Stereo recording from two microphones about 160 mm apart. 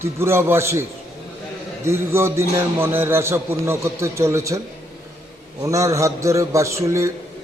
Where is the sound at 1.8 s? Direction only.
15° right (ahead or behind).